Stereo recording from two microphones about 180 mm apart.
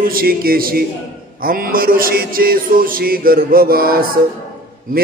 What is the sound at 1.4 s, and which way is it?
Music, 50° right (ahead or behind).